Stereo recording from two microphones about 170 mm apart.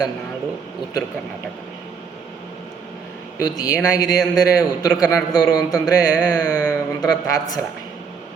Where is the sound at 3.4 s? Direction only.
20° left (ahead or behind).